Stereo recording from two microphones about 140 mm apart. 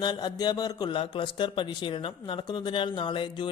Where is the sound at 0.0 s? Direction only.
30° left (ahead or behind).